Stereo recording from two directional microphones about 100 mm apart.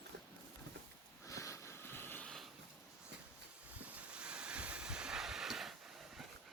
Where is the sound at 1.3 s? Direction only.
30° left (ahead or behind).